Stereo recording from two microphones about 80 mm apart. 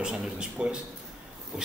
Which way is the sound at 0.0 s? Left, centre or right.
Centre.